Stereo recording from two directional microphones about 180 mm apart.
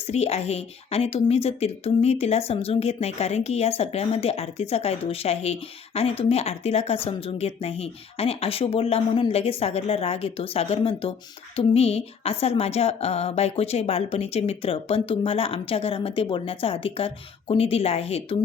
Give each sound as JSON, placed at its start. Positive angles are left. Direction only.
{"t": 0.1, "sound": "a woman's voice", "side_deg": 35}